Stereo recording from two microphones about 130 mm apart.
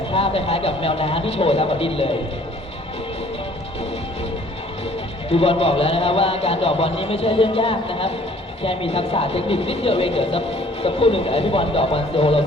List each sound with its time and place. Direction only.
0.1 s speech: 45° left (ahead or behind)
5.3 s speech: 50° left (ahead or behind)